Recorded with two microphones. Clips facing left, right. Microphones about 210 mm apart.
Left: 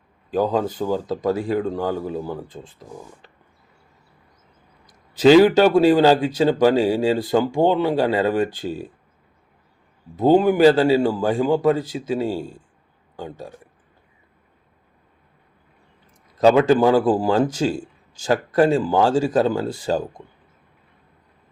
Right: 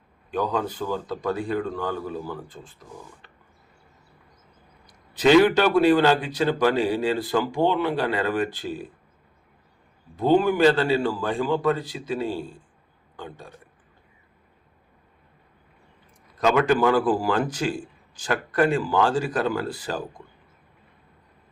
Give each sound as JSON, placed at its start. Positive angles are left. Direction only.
{"t": 0.3, "sound": "speech", "side_deg": 30}
{"t": 5.2, "sound": "speech", "side_deg": 30}
{"t": 10.4, "sound": "a man's voice", "side_deg": 30}
{"t": 16.4, "sound": "speech", "side_deg": 30}